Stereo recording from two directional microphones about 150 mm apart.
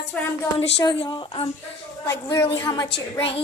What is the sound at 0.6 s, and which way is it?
Speech, 30° left (ahead or behind).